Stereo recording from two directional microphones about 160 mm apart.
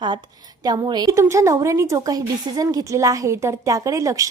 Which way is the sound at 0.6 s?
25° right (ahead or behind).